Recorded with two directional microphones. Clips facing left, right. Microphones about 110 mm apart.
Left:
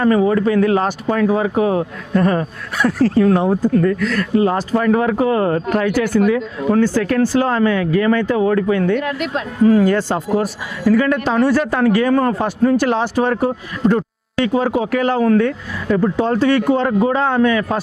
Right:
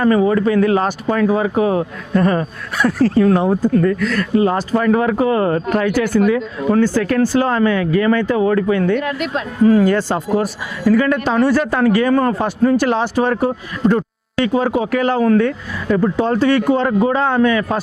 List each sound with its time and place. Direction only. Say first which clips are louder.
0.0 s speech: even; 20° right (ahead or behind)